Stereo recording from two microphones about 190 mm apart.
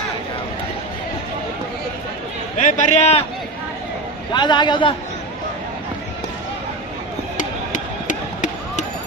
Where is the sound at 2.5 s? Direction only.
40° left (ahead or behind).